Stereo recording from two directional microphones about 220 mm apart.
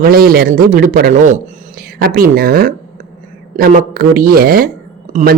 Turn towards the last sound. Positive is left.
turn(degrees=-35)  # may be behind; listen again after turning